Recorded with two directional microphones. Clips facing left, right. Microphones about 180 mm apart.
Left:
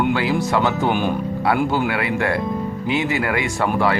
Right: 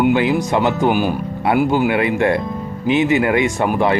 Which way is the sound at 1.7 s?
20° right (ahead or behind).